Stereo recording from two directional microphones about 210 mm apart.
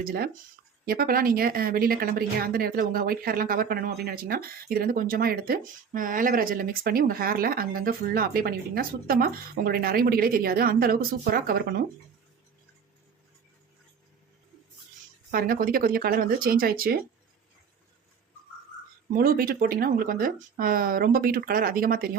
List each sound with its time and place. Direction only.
0.0 s speech: 45° right (ahead or behind)
15.3 s speech: 45° right (ahead or behind)
19.1 s speech: 40° right (ahead or behind)